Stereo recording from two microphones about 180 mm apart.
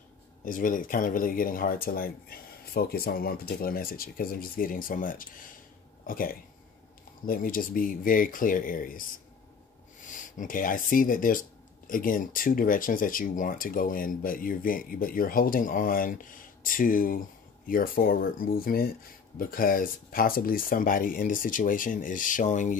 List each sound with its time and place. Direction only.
0.5 s speech: 50° left (ahead or behind)
10.0 s speech: 45° left (ahead or behind)